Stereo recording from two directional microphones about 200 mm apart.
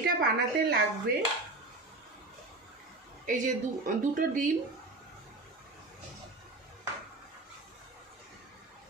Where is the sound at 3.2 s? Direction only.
40° right (ahead or behind).